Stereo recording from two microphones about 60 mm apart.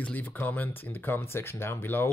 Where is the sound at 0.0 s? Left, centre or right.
Left.